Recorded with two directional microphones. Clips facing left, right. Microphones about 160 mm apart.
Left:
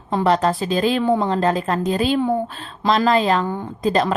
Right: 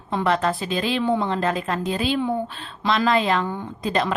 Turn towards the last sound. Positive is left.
turn(degrees=40)  # may be behind; listen again after turning